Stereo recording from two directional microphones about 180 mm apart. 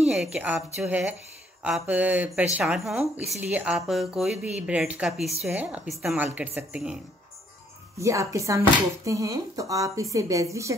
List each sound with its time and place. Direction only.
0.0 s a woman's voice: 5° right (ahead or behind)
8.0 s a woman's voice: 15° right (ahead or behind)